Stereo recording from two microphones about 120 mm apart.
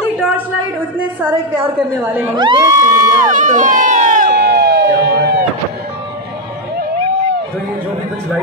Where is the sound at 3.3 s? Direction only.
90° right.